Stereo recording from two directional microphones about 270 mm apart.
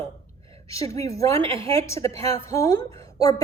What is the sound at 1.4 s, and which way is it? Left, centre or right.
Speech, centre.